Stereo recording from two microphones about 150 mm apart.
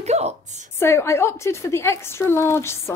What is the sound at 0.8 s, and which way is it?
A woman's voice, 15° left (ahead or behind).